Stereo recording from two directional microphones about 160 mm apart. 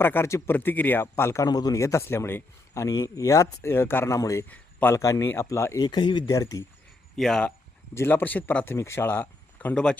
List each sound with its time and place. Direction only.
0.0 s speech: 15° left (ahead or behind)
7.2 s speech: 5° left (ahead or behind)